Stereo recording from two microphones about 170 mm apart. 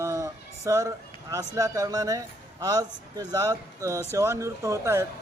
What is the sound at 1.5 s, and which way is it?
Speech, 20° right (ahead or behind).